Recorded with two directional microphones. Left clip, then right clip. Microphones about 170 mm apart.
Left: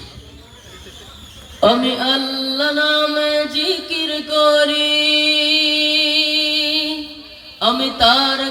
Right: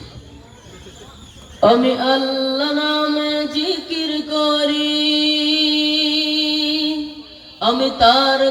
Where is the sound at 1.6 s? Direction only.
25° left (ahead or behind).